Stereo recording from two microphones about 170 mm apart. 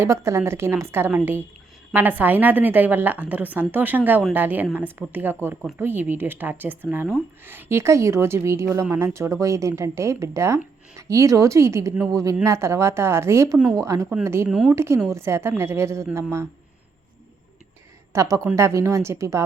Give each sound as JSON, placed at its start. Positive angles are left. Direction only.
{"t": 0.0, "sound": "a woman's voice", "side_deg": -15}
{"t": 18.1, "sound": "a woman's voice", "side_deg": -20}